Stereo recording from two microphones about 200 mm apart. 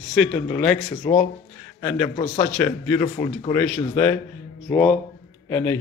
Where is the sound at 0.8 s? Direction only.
40° left (ahead or behind).